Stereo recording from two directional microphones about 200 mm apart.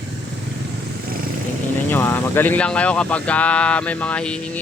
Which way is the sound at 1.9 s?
10° left (ahead or behind).